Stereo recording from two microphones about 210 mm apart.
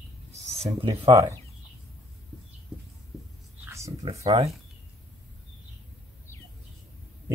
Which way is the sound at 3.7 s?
15° right (ahead or behind).